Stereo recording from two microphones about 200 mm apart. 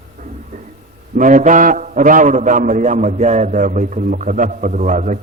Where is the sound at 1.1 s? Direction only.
40° right (ahead or behind).